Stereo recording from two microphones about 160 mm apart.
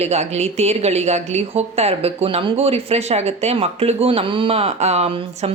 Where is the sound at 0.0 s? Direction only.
40° right (ahead or behind).